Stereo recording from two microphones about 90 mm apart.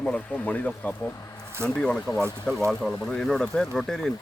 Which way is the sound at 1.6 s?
10° left (ahead or behind).